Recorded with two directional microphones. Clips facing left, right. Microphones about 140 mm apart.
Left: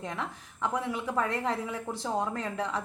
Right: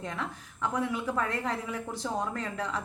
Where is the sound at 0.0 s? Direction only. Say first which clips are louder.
Even; 20° left (ahead or behind).